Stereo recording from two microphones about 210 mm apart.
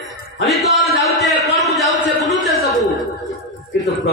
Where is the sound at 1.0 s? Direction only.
Centre (ahead or behind).